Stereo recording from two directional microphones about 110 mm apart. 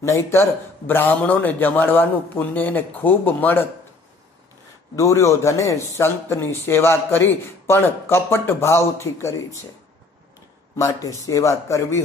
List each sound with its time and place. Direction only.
0.0 s a man's voice: 25° left (ahead or behind)
4.9 s speech: 25° left (ahead or behind)
10.8 s speech: 30° left (ahead or behind)